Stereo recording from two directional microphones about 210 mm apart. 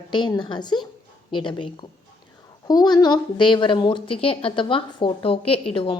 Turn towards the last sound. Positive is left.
turn(degrees=25)  # may be behind; listen again after turning